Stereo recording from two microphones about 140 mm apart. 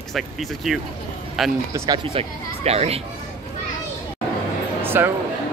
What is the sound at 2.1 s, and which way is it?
Speech, 50° right (ahead or behind).